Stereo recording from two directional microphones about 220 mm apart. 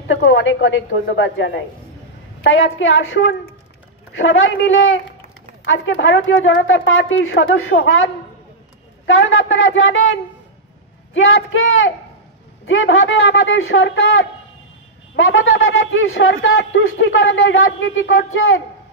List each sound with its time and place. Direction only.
0.1 s a man's voice: 60° left (ahead or behind)
9.0 s a man's voice: 60° left (ahead or behind)
11.1 s a man's voice: 60° left (ahead or behind)